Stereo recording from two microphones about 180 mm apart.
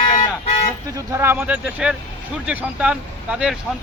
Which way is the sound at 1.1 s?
10° right (ahead or behind).